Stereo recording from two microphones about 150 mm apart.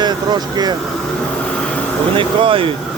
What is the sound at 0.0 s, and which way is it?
Speech, 30° right (ahead or behind).